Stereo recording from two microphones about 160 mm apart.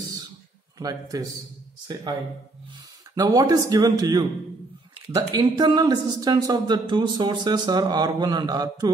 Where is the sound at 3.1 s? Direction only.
25° right (ahead or behind).